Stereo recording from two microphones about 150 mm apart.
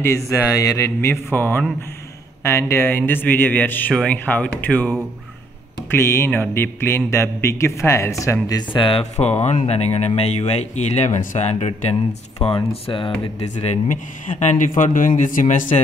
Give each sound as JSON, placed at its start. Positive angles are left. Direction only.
{"t": 0.0, "sound": "speech", "side_deg": 20}
{"t": 8.5, "sound": "speech", "side_deg": 30}
{"t": 9.1, "sound": "speech", "side_deg": 45}
{"t": 12.4, "sound": "speech", "side_deg": 35}